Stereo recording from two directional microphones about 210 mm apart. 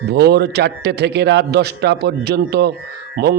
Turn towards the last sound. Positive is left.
turn(degrees=-45)  # may be behind; listen again after turning